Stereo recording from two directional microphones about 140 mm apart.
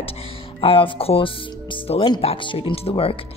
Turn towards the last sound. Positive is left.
turn(degrees=40)  # may be behind; listen again after turning